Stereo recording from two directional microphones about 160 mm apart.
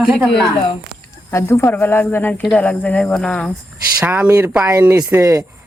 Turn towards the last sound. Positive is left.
turn(degrees=-20)  # may be behind; listen again after turning